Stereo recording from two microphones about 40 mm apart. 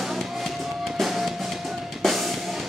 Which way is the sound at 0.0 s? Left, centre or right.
Centre.